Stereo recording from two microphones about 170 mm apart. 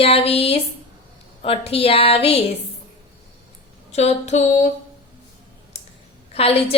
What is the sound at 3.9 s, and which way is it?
Speech, 40° left (ahead or behind).